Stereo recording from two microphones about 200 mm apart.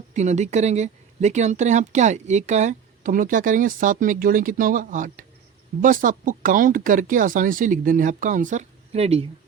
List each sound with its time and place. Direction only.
0.1 s speech: 35° right (ahead or behind)